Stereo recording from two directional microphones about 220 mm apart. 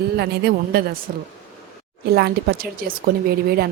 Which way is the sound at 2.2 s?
45° right (ahead or behind).